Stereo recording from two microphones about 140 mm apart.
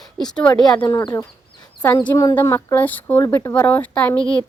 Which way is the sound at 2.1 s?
25° left (ahead or behind).